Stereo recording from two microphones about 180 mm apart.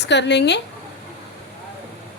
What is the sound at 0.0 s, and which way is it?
Speech, 70° left (ahead or behind).